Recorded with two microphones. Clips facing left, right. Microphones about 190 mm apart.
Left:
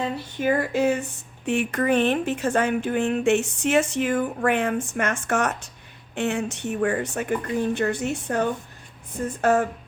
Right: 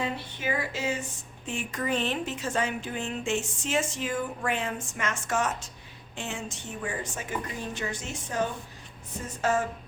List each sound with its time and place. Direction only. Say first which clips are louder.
0.3 s speech: left 13 dB; 50° left (ahead or behind)